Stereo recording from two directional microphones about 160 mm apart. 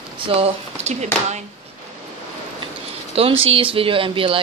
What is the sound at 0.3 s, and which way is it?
Speech, 40° right (ahead or behind).